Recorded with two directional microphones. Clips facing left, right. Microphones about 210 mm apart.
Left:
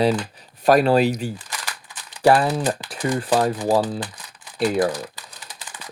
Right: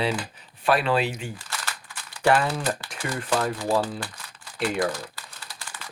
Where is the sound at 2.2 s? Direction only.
35° left (ahead or behind).